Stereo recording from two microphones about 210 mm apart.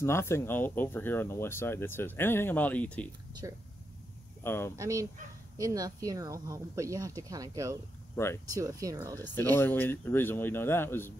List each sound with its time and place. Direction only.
0.0 s speech: 10° left (ahead or behind)
3.4 s speech: 15° right (ahead or behind)
4.4 s speech: 10° left (ahead or behind)
4.7 s speech: 15° right (ahead or behind)
9.2 s speech: 10° left (ahead or behind)